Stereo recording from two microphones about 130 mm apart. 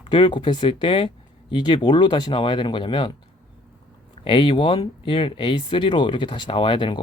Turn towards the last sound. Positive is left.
turn(degrees=40)  # may be behind; listen again after turning